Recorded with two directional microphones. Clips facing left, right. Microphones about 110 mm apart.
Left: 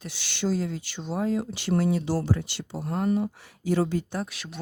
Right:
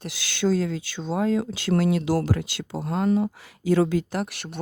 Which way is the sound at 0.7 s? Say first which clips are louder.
Right 4 dB; 90° right.